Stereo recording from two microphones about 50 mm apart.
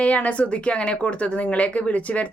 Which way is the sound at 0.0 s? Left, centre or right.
Left.